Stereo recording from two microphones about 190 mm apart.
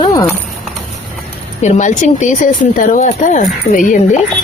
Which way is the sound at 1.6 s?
40° left (ahead or behind).